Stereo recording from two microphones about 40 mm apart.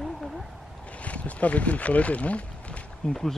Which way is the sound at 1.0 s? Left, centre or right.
Left.